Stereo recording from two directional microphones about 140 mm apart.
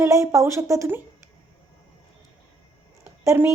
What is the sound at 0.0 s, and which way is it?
Speech, 20° right (ahead or behind).